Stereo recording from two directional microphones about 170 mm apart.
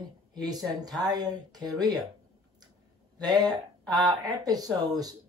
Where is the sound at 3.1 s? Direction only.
25° right (ahead or behind).